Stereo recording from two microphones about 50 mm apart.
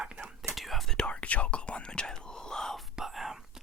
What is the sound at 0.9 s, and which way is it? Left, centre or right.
Whispering, left.